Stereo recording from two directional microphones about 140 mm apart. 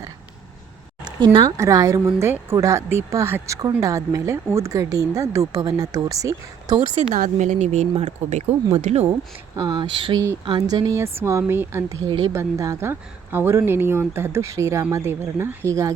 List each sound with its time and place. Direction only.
1.0 s a woman's voice: 35° right (ahead or behind)
7.1 s speech: 60° right (ahead or behind)
9.6 s a woman's voice: 30° right (ahead or behind)
12.0 s speech: 30° right (ahead or behind)
12.3 s a woman's voice: 20° right (ahead or behind)